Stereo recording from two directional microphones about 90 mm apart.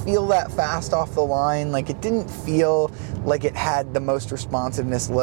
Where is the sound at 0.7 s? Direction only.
30° right (ahead or behind).